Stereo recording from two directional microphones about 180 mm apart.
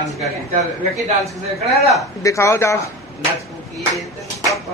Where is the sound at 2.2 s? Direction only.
15° left (ahead or behind).